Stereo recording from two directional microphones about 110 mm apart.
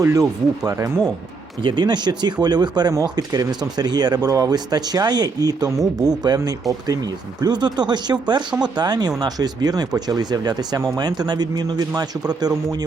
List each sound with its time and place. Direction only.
0.0 s speech: 30° right (ahead or behind)
1.6 s speech: 40° right (ahead or behind)